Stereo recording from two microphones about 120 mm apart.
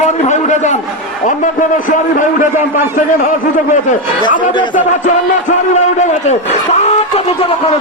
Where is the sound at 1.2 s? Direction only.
90° left.